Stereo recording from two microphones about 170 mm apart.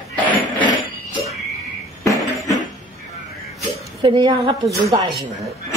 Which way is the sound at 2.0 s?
20° left (ahead or behind).